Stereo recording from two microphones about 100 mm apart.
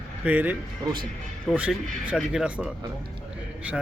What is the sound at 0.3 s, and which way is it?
Speech, 15° right (ahead or behind).